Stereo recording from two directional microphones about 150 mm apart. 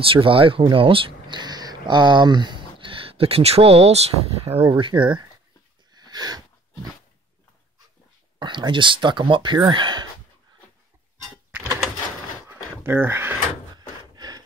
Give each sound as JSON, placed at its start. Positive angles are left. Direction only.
{"t": 0.1, "sound": "speech", "side_deg": -35}
{"t": 4.6, "sound": "speech", "side_deg": -30}
{"t": 5.9, "sound": "a sound", "side_deg": -25}
{"t": 8.4, "sound": "speech", "side_deg": -30}
{"t": 12.8, "sound": "speech", "side_deg": -15}
{"t": 13.7, "sound": "gasp", "side_deg": -25}